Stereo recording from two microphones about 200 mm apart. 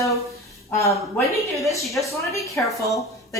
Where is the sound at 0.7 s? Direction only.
15° left (ahead or behind).